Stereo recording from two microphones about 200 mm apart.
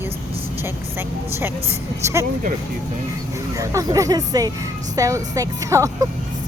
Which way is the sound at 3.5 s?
15° right (ahead or behind).